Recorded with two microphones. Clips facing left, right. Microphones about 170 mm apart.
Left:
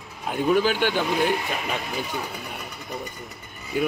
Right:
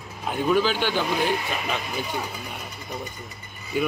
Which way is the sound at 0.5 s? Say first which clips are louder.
Left 1 dB; 55° left (ahead or behind).